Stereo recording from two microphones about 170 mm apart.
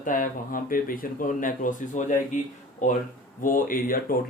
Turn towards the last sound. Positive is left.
turn(degrees=55)  # may be behind; listen again after turning